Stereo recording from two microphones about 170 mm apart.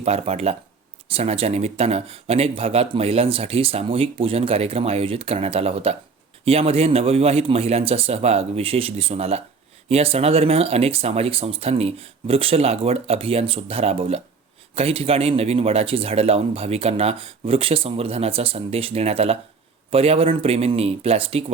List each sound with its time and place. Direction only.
0.0 s speech: 40° right (ahead or behind)